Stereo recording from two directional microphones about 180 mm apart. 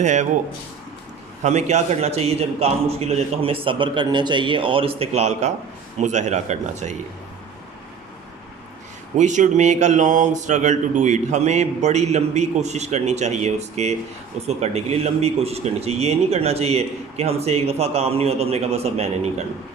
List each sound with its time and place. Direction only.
0.0 s speech: 40° right (ahead or behind)
1.5 s speech: 40° right (ahead or behind)
9.1 s speech: 40° right (ahead or behind)